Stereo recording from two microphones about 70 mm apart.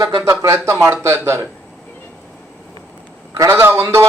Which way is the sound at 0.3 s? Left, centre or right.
Right.